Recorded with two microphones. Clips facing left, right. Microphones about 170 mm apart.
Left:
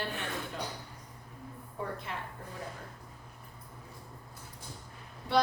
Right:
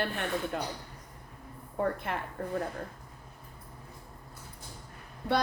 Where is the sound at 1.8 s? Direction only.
60° right (ahead or behind).